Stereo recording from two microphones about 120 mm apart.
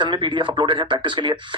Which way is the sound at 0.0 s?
40° right (ahead or behind).